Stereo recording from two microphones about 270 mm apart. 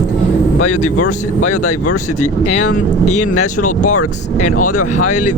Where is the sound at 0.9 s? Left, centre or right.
Left.